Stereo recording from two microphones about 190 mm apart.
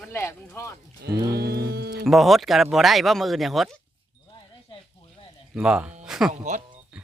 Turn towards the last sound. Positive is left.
turn(degrees=-40)  # may be behind; listen again after turning